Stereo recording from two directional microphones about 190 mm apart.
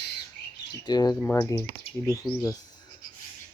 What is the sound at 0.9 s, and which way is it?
Speech, 20° left (ahead or behind).